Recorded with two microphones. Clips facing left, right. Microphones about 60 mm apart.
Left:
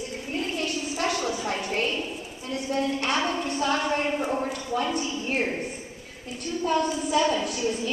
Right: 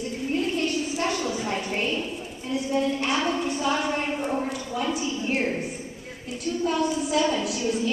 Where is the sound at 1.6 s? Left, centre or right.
Centre.